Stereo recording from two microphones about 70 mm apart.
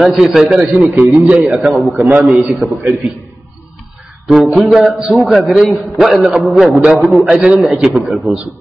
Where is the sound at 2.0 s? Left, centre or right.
Right.